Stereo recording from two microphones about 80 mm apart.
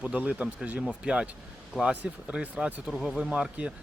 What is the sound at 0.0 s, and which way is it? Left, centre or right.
Speech, centre.